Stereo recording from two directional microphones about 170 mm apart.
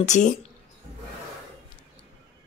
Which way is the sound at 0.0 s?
45° left (ahead or behind).